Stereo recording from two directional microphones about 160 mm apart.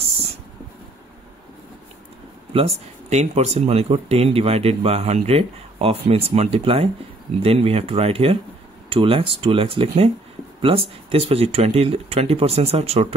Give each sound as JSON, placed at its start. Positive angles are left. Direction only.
{"t": 2.5, "sound": "speech", "side_deg": -40}